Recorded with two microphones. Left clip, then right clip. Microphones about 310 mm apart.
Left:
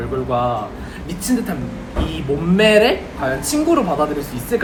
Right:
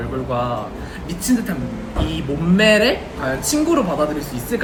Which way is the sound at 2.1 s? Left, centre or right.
Centre.